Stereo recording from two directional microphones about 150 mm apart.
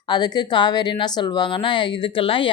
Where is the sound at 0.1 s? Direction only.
30° left (ahead or behind).